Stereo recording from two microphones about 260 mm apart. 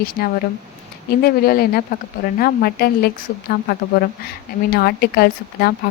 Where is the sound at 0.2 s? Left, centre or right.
Left.